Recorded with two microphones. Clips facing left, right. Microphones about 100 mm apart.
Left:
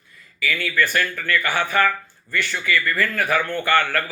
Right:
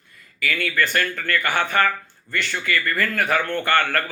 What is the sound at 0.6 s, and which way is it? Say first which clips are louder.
Speech: left 1 dB; 45° right (ahead or behind).